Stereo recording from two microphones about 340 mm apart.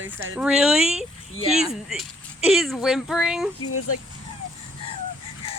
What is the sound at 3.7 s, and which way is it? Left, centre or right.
Speech, left.